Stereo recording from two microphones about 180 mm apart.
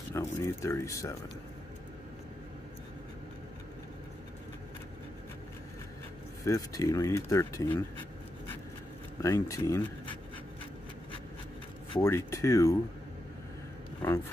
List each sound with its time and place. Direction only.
0.1 s speech: 15° left (ahead or behind)
6.4 s speech: 20° left (ahead or behind)
9.2 s speech: 15° left (ahead or behind)
12.0 s speech: 15° left (ahead or behind)
14.0 s speech: 10° left (ahead or behind)